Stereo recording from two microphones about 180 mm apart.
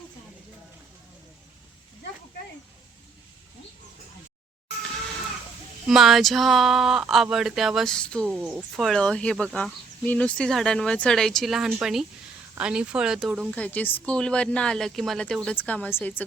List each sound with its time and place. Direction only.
5.9 s speech: centre (ahead or behind)
13.6 s speech: 10° left (ahead or behind)